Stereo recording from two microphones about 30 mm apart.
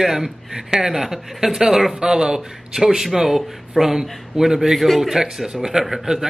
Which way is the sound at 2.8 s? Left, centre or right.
Centre.